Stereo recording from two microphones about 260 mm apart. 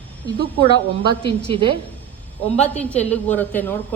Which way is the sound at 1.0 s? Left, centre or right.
Centre.